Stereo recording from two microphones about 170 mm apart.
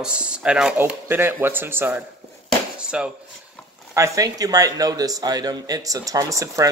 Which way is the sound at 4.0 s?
20° right (ahead or behind).